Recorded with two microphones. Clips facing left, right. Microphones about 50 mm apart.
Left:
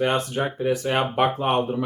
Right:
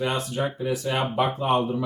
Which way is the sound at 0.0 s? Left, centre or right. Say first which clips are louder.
Left 3 dB; left.